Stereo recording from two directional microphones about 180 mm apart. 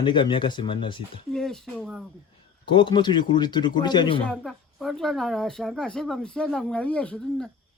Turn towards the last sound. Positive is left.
turn(degrees=5)  # may be behind; listen again after turning